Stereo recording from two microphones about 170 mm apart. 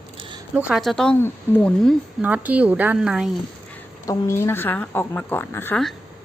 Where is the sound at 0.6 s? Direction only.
5° right (ahead or behind); by 1.7 s 15° left (ahead or behind).